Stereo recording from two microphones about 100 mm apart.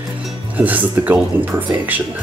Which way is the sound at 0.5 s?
15° right (ahead or behind).